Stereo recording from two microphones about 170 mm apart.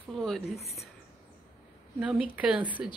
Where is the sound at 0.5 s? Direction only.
35° left (ahead or behind).